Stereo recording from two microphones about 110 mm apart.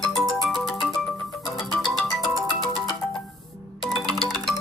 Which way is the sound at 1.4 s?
40° left (ahead or behind).